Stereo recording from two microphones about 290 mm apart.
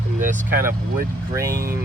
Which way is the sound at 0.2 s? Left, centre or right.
Right.